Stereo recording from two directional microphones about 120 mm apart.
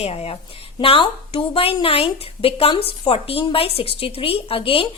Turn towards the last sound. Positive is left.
turn(degrees=50)  # may be behind; listen again after turning